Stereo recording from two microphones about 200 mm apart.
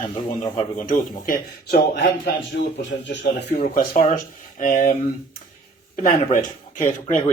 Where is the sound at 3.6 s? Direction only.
40° left (ahead or behind).